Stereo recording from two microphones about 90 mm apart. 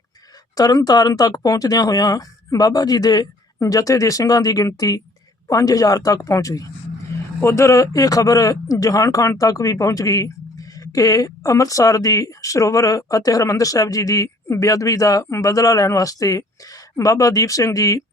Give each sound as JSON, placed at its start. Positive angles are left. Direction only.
{"t": 0.5, "sound": "speech", "side_deg": 45}